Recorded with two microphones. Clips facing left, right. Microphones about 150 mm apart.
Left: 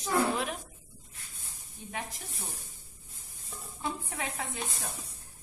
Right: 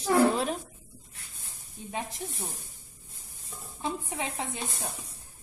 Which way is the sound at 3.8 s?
20° right (ahead or behind).